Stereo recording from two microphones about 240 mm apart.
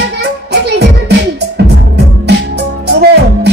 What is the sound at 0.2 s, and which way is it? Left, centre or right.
Music, right.